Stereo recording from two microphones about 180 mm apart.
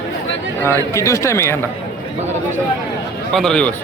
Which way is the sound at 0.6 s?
15° left (ahead or behind).